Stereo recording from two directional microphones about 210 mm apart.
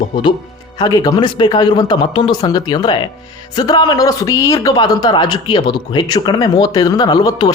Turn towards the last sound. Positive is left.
turn(degrees=20)  # may be behind; listen again after turning